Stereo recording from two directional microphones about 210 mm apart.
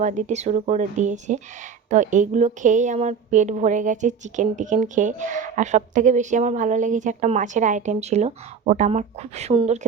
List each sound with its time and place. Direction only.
0.0 s a woman's voice: 35° right (ahead or behind)